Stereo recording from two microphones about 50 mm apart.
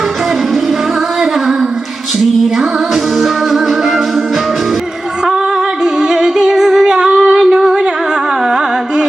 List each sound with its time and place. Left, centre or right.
2.1 s music: centre
5.8 s music: centre
8.4 s carnatic music: centre